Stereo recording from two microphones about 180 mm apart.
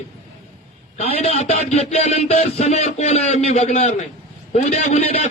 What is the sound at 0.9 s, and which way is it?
A man's voice, 35° left (ahead or behind).